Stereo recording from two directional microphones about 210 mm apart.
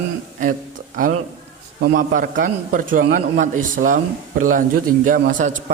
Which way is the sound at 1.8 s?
40° right (ahead or behind).